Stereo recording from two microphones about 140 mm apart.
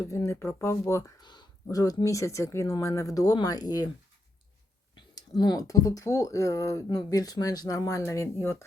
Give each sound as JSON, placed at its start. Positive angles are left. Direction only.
{"t": 0.0, "sound": "speech", "side_deg": 20}
{"t": 5.4, "sound": "speech", "side_deg": 25}